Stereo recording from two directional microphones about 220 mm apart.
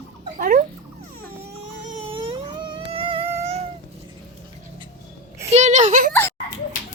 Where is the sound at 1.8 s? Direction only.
30° right (ahead or behind).